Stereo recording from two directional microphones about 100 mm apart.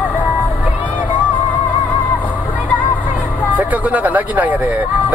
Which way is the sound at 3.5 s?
15° right (ahead or behind).